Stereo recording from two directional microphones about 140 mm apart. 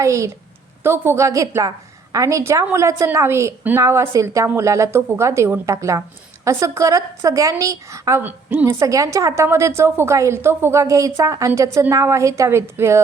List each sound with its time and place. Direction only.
0.0 s a woman's voice: 20° right (ahead or behind)